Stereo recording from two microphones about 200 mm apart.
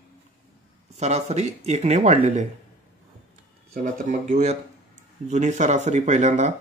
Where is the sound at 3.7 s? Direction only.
40° right (ahead or behind).